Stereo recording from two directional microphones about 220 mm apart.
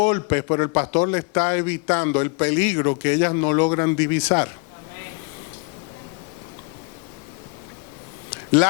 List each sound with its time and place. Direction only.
0.0 s a man's voice: 20° left (ahead or behind)